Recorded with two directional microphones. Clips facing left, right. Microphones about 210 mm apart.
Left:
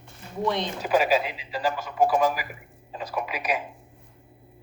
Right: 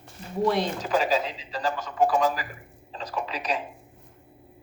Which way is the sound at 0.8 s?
10° left (ahead or behind).